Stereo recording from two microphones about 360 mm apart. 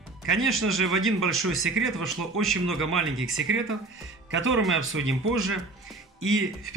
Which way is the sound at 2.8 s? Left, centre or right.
Right.